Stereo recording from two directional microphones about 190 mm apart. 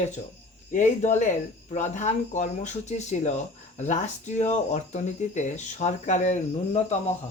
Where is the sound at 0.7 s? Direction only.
40° left (ahead or behind).